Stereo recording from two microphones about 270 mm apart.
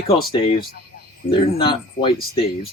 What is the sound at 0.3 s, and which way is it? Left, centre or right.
Speech, centre.